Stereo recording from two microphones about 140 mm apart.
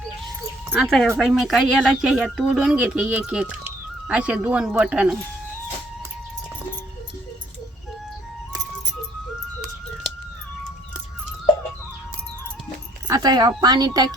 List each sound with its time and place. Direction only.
0.7 s speech: centre (ahead or behind)
13.1 s speech: 30° right (ahead or behind)